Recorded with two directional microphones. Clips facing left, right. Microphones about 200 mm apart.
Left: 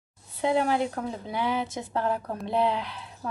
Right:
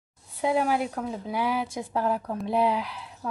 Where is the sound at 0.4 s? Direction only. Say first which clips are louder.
Even; 10° right (ahead or behind).